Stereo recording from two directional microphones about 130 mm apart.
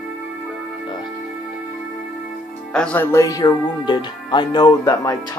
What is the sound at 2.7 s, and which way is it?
Speech, 10° left (ahead or behind).